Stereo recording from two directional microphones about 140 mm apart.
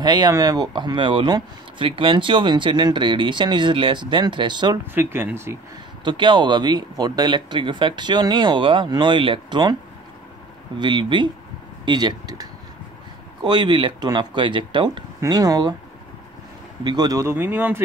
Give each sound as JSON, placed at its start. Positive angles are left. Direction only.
{"t": 0.0, "sound": "speech", "side_deg": -30}
{"t": 4.9, "sound": "speech", "side_deg": -15}
{"t": 6.0, "sound": "speech", "side_deg": -35}
{"t": 10.8, "sound": "speech", "side_deg": -35}
{"t": 16.8, "sound": "speech", "side_deg": -30}